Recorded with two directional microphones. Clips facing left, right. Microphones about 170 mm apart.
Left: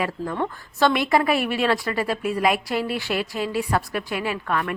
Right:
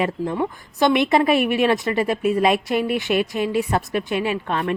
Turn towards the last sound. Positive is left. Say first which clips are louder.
# right 2 dB
turn(degrees=-25)  # may be behind; listen again after turning